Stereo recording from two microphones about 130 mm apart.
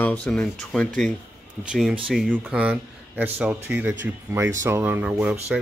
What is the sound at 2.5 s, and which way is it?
Speech, 10° right (ahead or behind).